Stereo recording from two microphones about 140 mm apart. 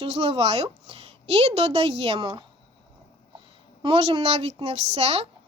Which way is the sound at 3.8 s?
45° right (ahead or behind).